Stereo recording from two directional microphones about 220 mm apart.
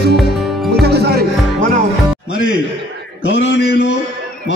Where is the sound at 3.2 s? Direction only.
55° left (ahead or behind).